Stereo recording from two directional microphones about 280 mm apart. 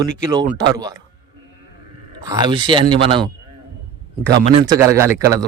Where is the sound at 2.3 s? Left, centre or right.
Centre.